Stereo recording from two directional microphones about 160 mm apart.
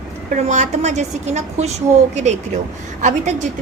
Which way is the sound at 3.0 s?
50° right (ahead or behind).